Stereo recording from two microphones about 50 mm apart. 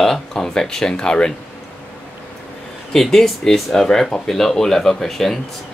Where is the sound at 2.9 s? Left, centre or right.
Centre.